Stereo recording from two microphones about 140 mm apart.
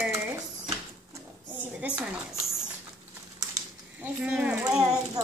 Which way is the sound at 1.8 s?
10° right (ahead or behind).